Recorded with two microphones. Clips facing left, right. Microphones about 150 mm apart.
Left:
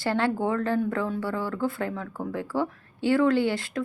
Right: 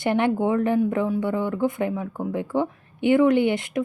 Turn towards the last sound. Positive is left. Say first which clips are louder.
# right 4 dB
turn(degrees=-20)  # may be behind; listen again after turning